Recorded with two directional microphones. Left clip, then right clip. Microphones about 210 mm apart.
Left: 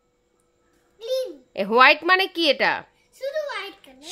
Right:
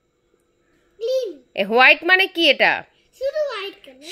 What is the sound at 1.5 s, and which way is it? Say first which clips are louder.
A child's voice: right 2 dB; 5° left (ahead or behind).